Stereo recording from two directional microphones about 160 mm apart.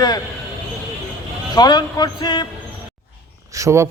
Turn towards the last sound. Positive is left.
turn(degrees=-20)  # may be behind; listen again after turning